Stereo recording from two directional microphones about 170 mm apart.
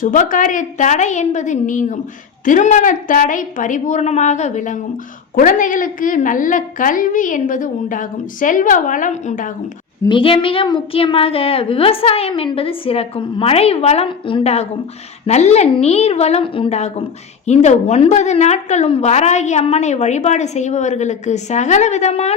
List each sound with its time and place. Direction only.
0.0 s a woman's voice: 50° left (ahead or behind)
10.1 s a woman's voice: 30° left (ahead or behind)